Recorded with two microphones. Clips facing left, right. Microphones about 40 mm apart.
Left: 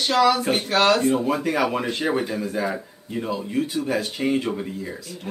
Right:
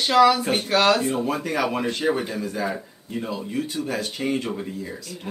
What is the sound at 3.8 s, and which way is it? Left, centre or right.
Speech, centre.